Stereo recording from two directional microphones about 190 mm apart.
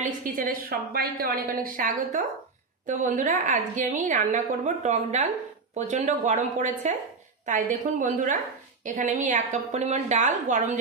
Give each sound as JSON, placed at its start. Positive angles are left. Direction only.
{"t": 0.2, "sound": "a woman's voice", "side_deg": -50}